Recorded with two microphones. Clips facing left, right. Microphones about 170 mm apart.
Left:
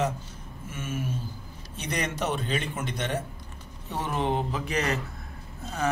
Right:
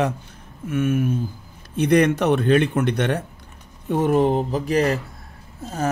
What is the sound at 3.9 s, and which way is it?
Speech, 50° right (ahead or behind).